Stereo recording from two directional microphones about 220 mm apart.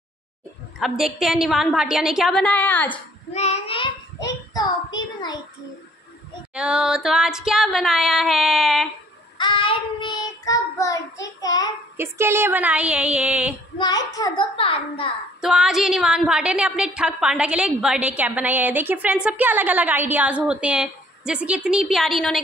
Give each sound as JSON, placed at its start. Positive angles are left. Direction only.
{"t": 0.7, "sound": "a woman's voice", "side_deg": 0}
{"t": 3.3, "sound": "a child's voice", "side_deg": 30}
{"t": 6.5, "sound": "a woman's voice", "side_deg": -5}
{"t": 9.4, "sound": "child singing", "side_deg": 20}
{"t": 12.0, "sound": "speech", "side_deg": -10}
{"t": 13.7, "sound": "a child's voice", "side_deg": 20}
{"t": 15.4, "sound": "a woman's voice", "side_deg": 0}